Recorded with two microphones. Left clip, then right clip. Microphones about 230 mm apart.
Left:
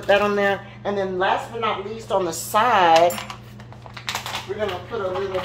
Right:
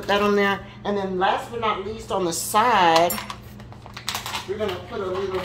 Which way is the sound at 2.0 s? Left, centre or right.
Right.